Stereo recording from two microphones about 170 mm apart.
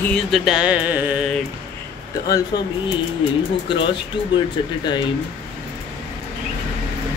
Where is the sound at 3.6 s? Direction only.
30° left (ahead or behind).